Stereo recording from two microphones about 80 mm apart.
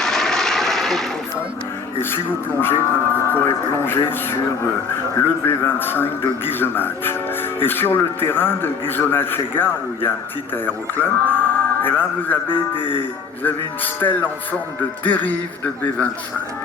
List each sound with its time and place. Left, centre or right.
0.0 s vehicle: centre
2.0 s a man's voice: left
12.8 s speech: left
13.4 s a man's voice: left